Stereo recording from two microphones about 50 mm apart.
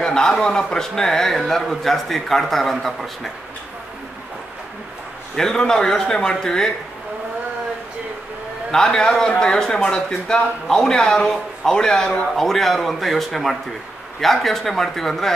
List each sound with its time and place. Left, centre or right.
0.0 s a man's voice: centre
5.3 s a man's voice: centre
8.7 s a man's voice: centre
12.4 s speech: centre